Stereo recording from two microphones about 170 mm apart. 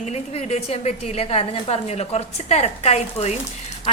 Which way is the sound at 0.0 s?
40° left (ahead or behind).